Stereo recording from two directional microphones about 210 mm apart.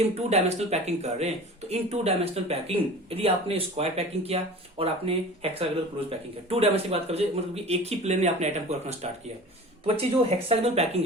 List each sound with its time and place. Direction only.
0.0 s speech: 30° right (ahead or behind)